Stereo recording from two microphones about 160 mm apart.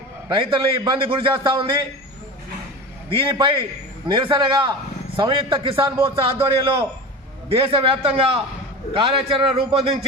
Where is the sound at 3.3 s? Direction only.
30° right (ahead or behind).